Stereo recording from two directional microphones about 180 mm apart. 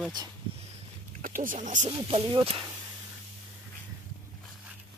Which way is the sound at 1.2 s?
50° right (ahead or behind).